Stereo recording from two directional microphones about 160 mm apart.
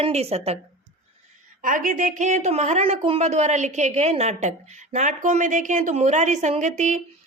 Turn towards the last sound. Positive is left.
turn(degrees=-50)  # may be behind; listen again after turning